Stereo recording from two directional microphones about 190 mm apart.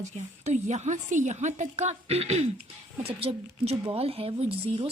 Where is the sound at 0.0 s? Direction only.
40° right (ahead or behind).